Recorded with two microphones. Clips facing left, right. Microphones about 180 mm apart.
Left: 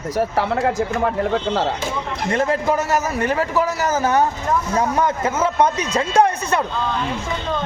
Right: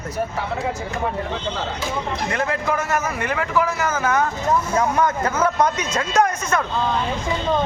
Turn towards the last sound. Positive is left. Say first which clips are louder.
# left 2 dB
turn(degrees=30)  # may be behind; listen again after turning